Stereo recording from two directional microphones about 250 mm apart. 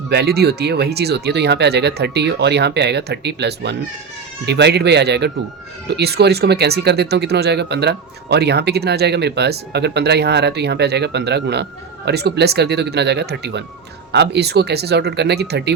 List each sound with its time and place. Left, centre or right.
0.1 s speech: right